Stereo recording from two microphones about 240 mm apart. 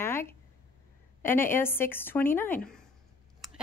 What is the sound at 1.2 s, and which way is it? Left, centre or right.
A woman's voice, centre.